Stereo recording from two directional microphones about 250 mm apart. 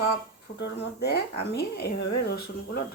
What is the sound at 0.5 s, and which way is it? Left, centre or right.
Speech, left.